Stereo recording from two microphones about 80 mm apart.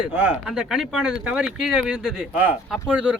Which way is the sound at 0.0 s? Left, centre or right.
Centre.